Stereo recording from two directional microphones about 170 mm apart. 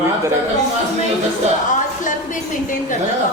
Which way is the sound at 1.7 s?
50° left (ahead or behind).